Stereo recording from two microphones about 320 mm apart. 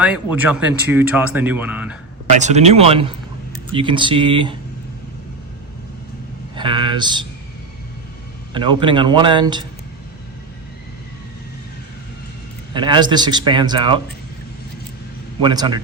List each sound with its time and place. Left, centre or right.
0.3 s speech: centre
2.3 s a man's voice: right
6.6 s a man's voice: centre
8.5 s a man's voice: centre
12.7 s a man's voice: centre
15.4 s a man's voice: centre